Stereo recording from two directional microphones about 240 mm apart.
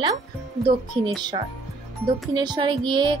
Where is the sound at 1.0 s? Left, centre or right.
Right.